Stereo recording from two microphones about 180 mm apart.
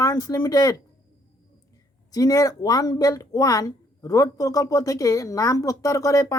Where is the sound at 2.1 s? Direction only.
20° left (ahead or behind).